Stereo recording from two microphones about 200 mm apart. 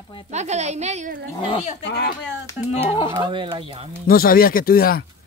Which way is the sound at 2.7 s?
30° left (ahead or behind).